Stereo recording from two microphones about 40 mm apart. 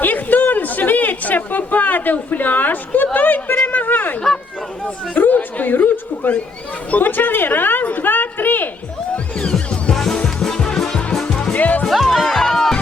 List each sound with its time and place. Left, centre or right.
0.0 s a sound: left
6.9 s a woman's voice: left
7.9 s a sound: left
9.1 s music: left
9.9 s music: centre
10.8 s music: centre
11.5 s music: left
12.0 s music: centre